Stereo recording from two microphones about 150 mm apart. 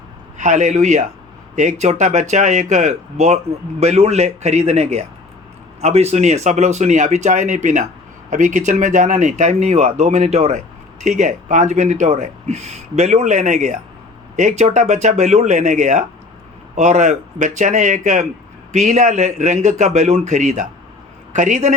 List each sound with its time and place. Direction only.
0.3 s speech: 55° right (ahead or behind)